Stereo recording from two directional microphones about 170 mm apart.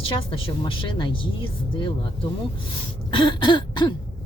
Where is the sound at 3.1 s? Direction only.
30° left (ahead or behind).